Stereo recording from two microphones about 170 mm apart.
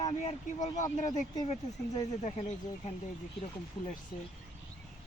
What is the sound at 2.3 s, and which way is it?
Speech, 40° left (ahead or behind).